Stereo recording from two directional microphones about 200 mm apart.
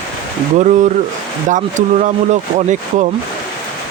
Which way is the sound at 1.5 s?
40° right (ahead or behind).